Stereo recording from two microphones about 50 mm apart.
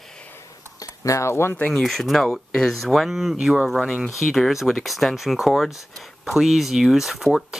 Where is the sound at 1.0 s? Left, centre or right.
Left.